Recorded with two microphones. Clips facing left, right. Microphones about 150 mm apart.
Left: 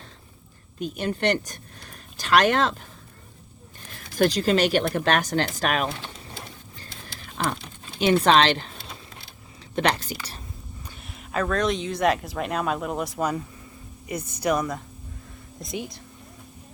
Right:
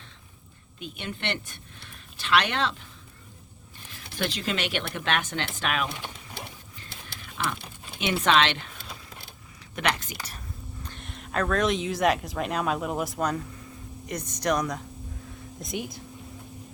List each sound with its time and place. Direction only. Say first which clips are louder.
0.8 s speech: left 9 dB; 40° left (ahead or behind)
4.1 s speech: left 9 dB; 40° left (ahead or behind)
7.3 s speech: left 4 dB; 40° left (ahead or behind)
9.7 s speech: left 5 dB; 35° left (ahead or behind)
10.8 s speech: right 1 dB; 5° left (ahead or behind)